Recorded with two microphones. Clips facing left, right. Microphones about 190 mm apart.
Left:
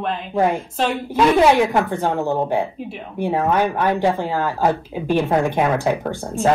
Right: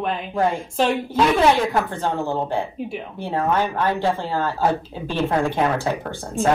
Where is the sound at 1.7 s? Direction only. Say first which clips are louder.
Left 3 dB; 15° left (ahead or behind).